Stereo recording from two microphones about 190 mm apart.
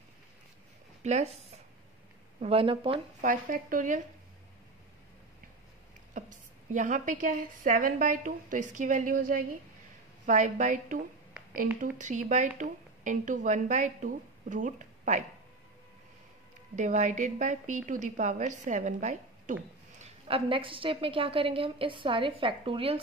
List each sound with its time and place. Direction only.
1.0 s speech: 35° right (ahead or behind)
2.4 s a woman's voice: 30° right (ahead or behind)
3.2 s a woman's voice: 45° right (ahead or behind)
6.2 s a sound: 40° right (ahead or behind)
6.7 s a woman's voice: 40° right (ahead or behind)
16.7 s speech: 40° right (ahead or behind)
20.0 s a woman's voice: 30° right (ahead or behind)